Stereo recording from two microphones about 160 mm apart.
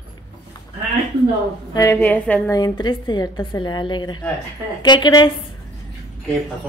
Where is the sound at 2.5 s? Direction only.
25° left (ahead or behind).